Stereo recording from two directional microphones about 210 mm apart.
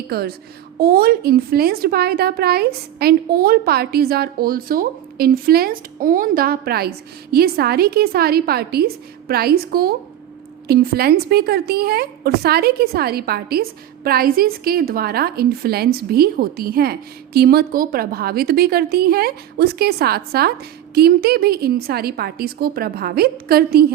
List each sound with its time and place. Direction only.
0.1 s a woman's voice: 45° right (ahead or behind)